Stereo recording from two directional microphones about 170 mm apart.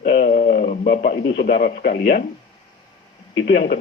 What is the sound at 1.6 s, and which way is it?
Speech, 70° left (ahead or behind).